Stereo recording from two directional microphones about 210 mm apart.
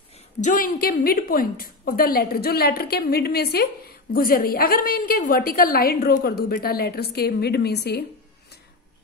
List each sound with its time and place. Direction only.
0.4 s a woman's voice: 40° left (ahead or behind)